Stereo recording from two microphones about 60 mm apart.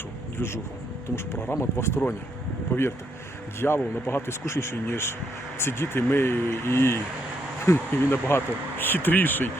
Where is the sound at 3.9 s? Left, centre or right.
Left.